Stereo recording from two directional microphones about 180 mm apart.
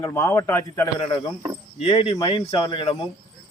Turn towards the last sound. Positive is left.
turn(degrees=30)  # may be behind; listen again after turning